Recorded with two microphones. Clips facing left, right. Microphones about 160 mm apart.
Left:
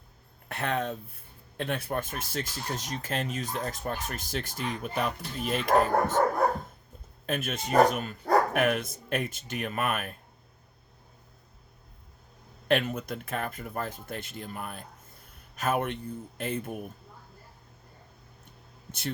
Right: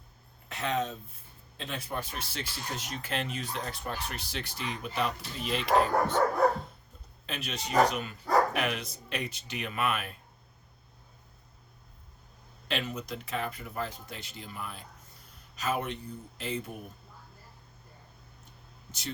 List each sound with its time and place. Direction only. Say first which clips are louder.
0.4 s speech: left 1 dB; 55° left (ahead or behind)
7.3 s speech: left 6 dB; 50° left (ahead or behind)
12.6 s speech: left 7 dB; 55° left (ahead or behind)
18.9 s speech: left 5 dB; 55° left (ahead or behind)